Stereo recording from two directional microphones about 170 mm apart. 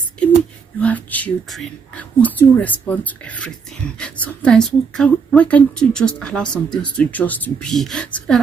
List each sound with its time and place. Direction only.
0.7 s speech: 10° left (ahead or behind)
6.5 s speech: 25° left (ahead or behind)
7.0 s speech: 10° left (ahead or behind)